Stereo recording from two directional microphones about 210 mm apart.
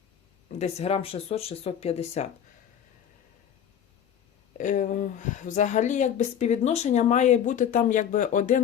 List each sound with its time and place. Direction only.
0.6 s speech: 30° left (ahead or behind)
4.5 s speech: 40° left (ahead or behind)